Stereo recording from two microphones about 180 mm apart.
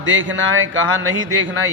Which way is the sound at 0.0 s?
90° right.